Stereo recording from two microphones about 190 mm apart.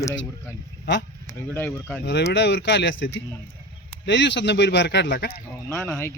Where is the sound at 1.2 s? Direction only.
10° left (ahead or behind).